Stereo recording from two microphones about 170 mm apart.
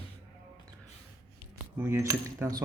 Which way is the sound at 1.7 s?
15° right (ahead or behind).